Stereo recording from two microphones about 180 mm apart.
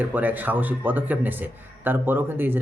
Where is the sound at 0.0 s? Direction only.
10° right (ahead or behind).